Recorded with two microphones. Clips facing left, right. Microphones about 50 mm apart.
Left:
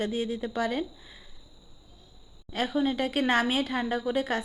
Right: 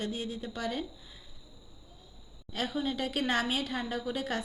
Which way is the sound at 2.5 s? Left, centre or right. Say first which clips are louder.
Left 6 dB; left.